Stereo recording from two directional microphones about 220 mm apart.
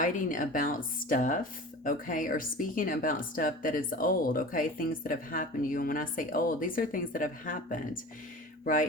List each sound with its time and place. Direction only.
0.0 s speech: 40° left (ahead or behind)